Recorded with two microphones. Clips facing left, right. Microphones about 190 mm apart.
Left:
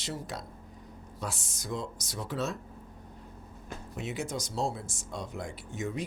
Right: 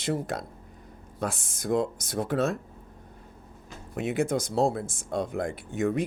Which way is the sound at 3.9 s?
55° right (ahead or behind).